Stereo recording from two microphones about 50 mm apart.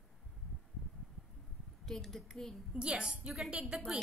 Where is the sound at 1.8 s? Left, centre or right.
Centre.